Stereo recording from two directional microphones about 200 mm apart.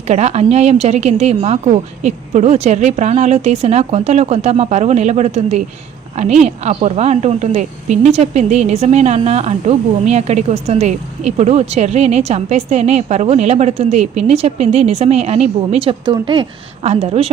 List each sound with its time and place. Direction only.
0.1 s a woman's voice: 35° right (ahead or behind)